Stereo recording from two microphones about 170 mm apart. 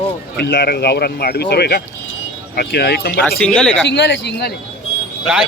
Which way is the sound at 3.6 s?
5° left (ahead or behind).